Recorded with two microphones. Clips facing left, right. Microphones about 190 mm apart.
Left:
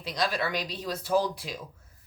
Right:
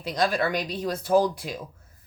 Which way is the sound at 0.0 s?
50° right (ahead or behind).